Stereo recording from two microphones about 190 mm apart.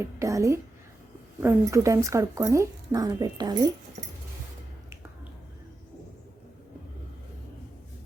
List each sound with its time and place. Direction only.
0.0 s speech: 15° right (ahead or behind)